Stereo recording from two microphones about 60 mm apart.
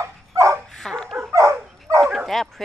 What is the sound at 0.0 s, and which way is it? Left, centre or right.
Dog, right.